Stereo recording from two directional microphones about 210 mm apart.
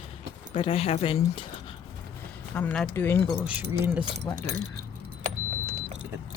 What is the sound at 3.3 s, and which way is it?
Speech, 5° right (ahead or behind).